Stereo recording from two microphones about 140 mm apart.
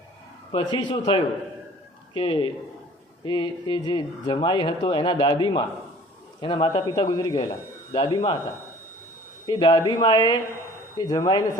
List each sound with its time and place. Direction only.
0.5 s speech: 35° left (ahead or behind)
9.5 s speech: 30° left (ahead or behind)